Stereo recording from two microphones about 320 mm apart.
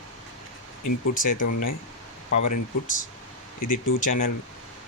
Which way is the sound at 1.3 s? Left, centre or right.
Left.